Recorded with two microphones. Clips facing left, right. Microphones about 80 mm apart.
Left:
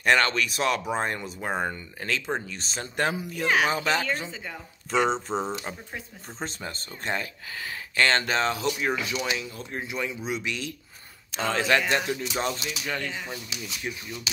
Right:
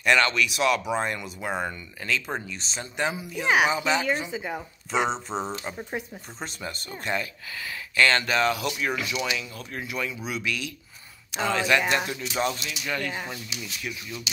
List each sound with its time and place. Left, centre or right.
0.0 s speech: left
3.4 s speech: centre
4.9 s speech: centre
6.4 s speech: left
11.4 s speech: left
13.1 s speech: right